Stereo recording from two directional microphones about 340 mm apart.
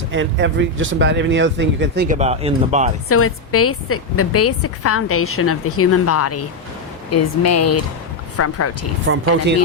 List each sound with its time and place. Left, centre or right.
0.1 s speech: right
3.1 s a woman's voice: left